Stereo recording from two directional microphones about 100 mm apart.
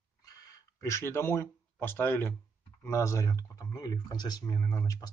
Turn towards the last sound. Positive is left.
turn(degrees=40)  # may be behind; listen again after turning